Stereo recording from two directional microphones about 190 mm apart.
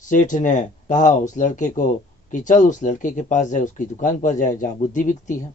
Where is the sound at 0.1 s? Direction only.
40° left (ahead or behind).